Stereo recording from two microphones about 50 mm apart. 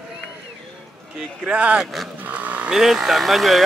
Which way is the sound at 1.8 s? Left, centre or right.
Centre.